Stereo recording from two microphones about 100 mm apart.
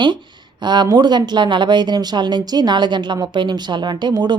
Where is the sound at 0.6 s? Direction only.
45° right (ahead or behind).